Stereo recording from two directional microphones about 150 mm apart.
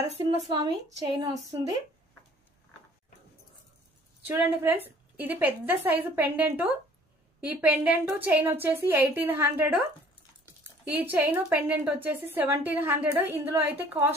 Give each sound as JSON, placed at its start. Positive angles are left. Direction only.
{"t": 0.5, "sound": "a woman's voice", "side_deg": -30}
{"t": 4.3, "sound": "a woman's voice", "side_deg": -10}
{"t": 10.9, "sound": "a woman's voice", "side_deg": -10}